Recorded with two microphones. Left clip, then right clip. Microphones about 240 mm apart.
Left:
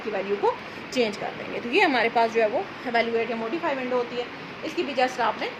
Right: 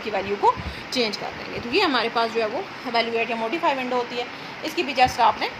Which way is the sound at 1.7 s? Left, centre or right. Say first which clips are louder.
Even; right.